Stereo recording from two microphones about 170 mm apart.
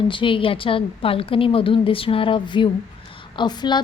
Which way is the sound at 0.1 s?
30° left (ahead or behind).